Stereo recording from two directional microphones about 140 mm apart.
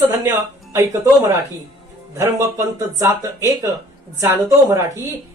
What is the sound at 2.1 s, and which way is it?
Speech, 20° right (ahead or behind).